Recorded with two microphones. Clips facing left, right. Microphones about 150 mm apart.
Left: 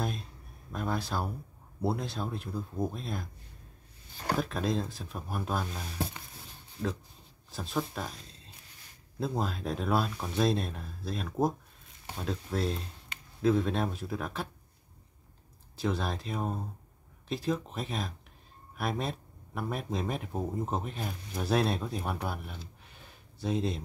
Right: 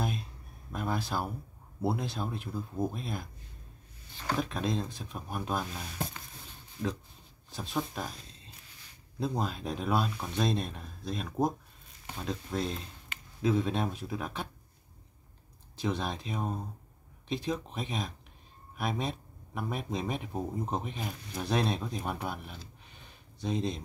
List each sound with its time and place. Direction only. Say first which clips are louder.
0.7 s speech: even; centre (ahead or behind)
4.4 s speech: left 1 dB; centre (ahead or behind)
6.8 s speech: even; 30° left (ahead or behind)
7.5 s speech: left 1 dB; centre (ahead or behind)
15.7 s speech: left 1 dB; centre (ahead or behind)
22.8 s a sound: left 1 dB; 5° left (ahead or behind)